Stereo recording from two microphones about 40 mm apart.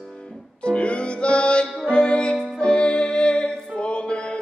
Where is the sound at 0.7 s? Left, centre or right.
Left.